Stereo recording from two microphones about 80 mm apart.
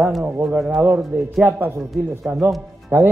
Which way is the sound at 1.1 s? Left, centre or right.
Right.